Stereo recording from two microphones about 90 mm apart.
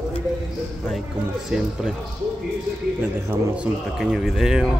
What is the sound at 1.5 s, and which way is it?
Speech, 5° right (ahead or behind).